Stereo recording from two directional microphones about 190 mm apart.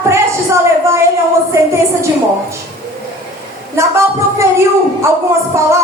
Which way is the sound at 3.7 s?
15° right (ahead or behind).